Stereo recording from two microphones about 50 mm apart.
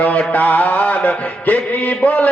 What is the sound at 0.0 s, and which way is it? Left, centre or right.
Mantra, left.